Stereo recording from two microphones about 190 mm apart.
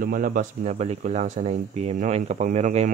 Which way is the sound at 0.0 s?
50° right (ahead or behind).